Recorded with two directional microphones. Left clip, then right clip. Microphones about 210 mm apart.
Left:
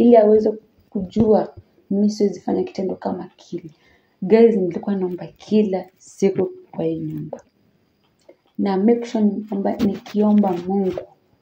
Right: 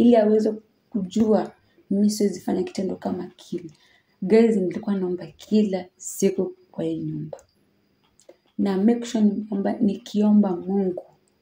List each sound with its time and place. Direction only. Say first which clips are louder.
0.0 s a woman's voice: left 5 dB; 5° left (ahead or behind)
8.6 s a woman's voice: left 5 dB; 5° left (ahead or behind)